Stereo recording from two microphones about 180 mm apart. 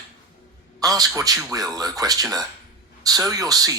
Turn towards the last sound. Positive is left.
turn(degrees=-20)  # may be behind; listen again after turning